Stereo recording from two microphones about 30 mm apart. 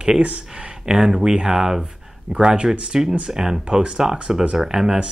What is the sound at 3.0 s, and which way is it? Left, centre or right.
Speech, right.